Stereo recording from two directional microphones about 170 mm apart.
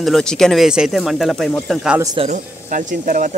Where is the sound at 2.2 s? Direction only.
45° right (ahead or behind).